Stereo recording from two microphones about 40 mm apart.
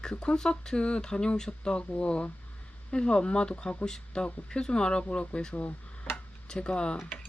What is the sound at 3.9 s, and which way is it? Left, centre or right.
Speech, left.